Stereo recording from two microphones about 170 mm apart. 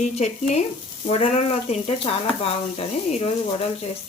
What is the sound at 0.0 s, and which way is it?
Speech, 40° left (ahead or behind).